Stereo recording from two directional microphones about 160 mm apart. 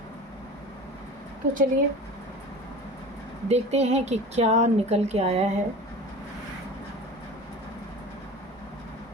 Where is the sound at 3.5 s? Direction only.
40° right (ahead or behind).